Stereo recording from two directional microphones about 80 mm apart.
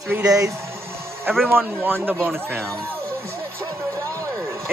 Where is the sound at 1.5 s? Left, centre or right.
Right.